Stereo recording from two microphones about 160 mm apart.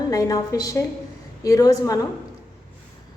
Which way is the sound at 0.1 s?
20° left (ahead or behind).